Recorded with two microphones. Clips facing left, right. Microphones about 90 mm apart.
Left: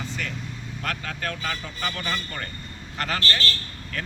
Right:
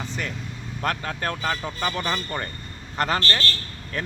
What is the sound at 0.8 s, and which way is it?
Speech, 35° right (ahead or behind).